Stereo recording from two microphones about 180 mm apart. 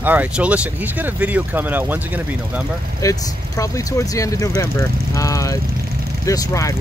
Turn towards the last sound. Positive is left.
turn(degrees=15)  # may be behind; listen again after turning